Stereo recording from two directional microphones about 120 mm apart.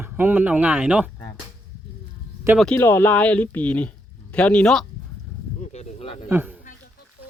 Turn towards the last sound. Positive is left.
turn(degrees=-15)  # may be behind; listen again after turning